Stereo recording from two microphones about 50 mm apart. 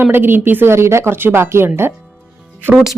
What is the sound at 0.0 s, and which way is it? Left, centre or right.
Speech, right.